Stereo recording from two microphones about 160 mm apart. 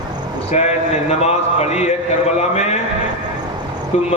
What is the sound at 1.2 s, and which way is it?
Speech, 45° left (ahead or behind).